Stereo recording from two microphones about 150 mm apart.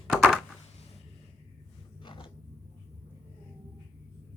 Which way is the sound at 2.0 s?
35° left (ahead or behind).